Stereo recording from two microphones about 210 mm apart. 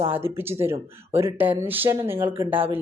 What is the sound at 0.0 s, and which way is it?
Speech, 10° right (ahead or behind).